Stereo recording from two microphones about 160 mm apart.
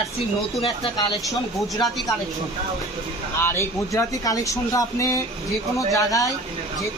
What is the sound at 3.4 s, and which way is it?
Speech, 15° left (ahead or behind).